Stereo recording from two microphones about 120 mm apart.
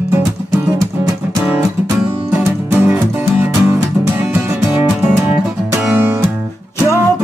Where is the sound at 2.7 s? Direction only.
15° right (ahead or behind).